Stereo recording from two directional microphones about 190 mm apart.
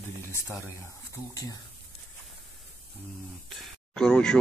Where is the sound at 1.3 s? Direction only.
20° left (ahead or behind).